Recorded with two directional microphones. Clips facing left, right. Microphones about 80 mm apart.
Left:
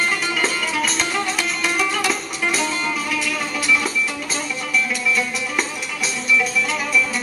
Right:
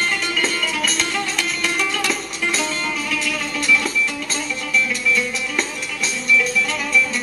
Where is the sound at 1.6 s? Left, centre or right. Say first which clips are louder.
Left 2 dB; centre.